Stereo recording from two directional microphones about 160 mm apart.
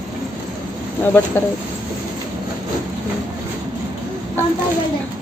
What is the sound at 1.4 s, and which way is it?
Speech, 10° left (ahead or behind).